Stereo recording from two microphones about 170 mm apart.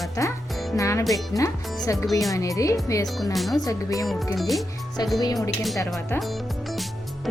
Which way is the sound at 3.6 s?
20° left (ahead or behind).